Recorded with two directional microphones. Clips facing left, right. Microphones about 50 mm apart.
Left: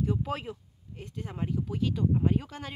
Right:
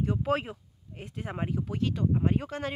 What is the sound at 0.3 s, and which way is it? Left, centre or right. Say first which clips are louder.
Speech: right 6 dB; centre.